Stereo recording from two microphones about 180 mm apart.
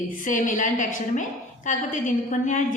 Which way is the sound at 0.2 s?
45° left (ahead or behind).